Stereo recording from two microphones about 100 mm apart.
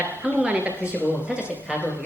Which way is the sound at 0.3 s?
15° right (ahead or behind).